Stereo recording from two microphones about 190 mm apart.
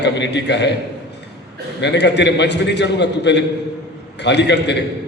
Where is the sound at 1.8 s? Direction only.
65° left (ahead or behind).